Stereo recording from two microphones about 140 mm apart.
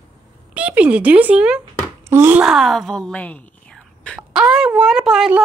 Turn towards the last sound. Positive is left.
turn(degrees=-5)  # may be behind; listen again after turning